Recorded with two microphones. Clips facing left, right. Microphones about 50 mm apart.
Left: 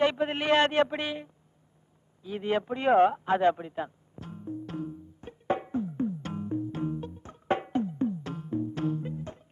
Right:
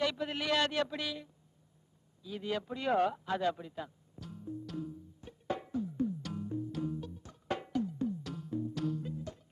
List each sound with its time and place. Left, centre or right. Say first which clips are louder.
0.0 s speech: left 8 dB; left
2.2 s a sound: left 8 dB; left
8.6 s music: left 4 dB; left